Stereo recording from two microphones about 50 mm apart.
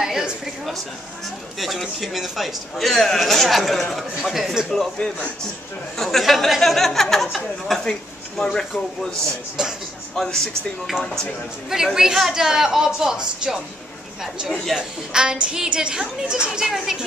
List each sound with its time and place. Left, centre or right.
0.0 s a woman's voice: centre
4.6 s a man's voice: centre
9.6 s a woman's voice: centre
10.1 s speech: centre
11.7 s a woman's voice: centre